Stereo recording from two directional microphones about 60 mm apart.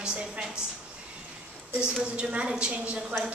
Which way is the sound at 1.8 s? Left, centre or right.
Centre.